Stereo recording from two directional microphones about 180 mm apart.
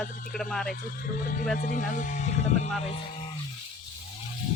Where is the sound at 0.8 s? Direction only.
50° left (ahead or behind).